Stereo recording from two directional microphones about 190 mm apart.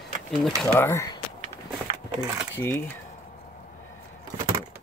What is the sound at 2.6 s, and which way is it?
Speech, 10° left (ahead or behind).